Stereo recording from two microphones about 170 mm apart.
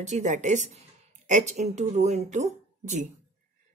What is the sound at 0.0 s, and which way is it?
A woman's voice, 45° right (ahead or behind).